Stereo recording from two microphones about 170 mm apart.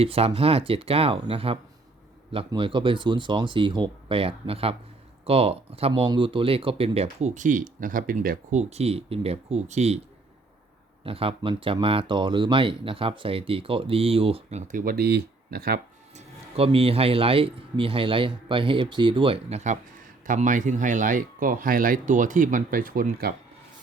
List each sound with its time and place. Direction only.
0.0 s speech: 35° right (ahead or behind)
11.0 s speech: 35° right (ahead or behind); by 15.8 s 65° right (ahead or behind)
16.1 s speech: 35° right (ahead or behind); by 23.3 s 55° right (ahead or behind)